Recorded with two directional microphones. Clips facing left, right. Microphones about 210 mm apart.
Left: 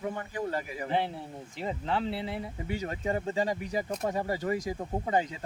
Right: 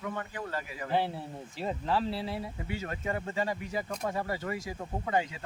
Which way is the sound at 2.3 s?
20° left (ahead or behind).